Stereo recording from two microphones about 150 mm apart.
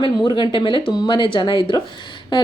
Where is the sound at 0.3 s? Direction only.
30° left (ahead or behind).